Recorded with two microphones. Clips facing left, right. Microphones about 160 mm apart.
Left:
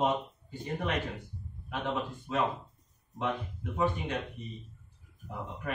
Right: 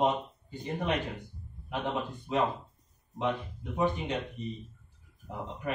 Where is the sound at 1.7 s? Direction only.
15° right (ahead or behind).